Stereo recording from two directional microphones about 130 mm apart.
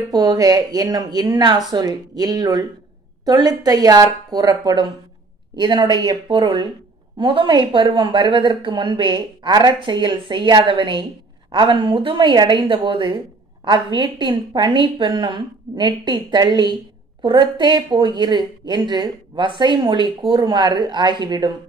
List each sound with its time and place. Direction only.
0.1 s a woman's voice: 30° right (ahead or behind)